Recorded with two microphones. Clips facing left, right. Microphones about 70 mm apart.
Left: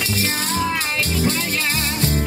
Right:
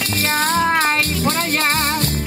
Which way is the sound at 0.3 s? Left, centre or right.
Right.